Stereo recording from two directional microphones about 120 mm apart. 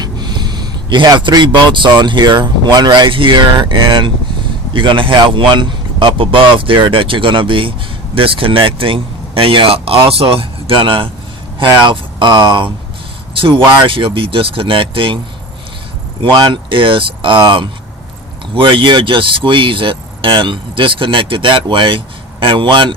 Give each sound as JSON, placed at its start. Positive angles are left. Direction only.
{"t": 0.0, "sound": "a man's voice", "side_deg": -35}
{"t": 16.2, "sound": "speech", "side_deg": -40}